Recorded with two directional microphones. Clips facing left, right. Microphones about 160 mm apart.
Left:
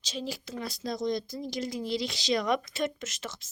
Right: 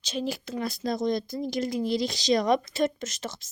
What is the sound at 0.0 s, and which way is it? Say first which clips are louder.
Speech: right 5 dB; 60° right (ahead or behind).